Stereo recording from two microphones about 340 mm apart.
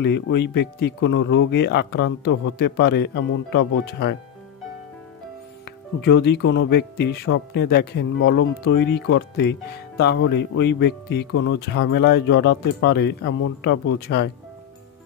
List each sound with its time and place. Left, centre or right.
0.0 s speech: left
5.9 s speech: left